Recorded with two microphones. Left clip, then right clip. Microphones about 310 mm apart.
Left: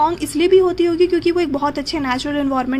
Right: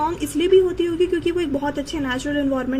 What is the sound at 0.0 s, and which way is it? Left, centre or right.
Speech, left.